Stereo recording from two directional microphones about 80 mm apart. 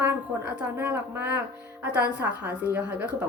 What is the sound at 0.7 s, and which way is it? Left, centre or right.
Speech, right.